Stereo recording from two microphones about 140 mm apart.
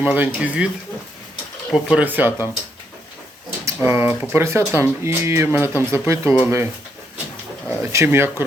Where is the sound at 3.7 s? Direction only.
15° right (ahead or behind).